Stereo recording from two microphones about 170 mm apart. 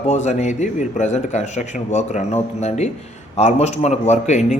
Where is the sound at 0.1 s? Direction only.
45° left (ahead or behind).